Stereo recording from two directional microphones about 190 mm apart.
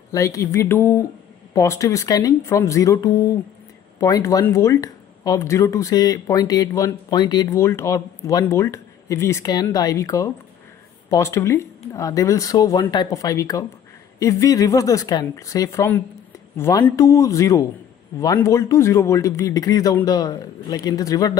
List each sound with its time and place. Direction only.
0.1 s speech: 15° left (ahead or behind)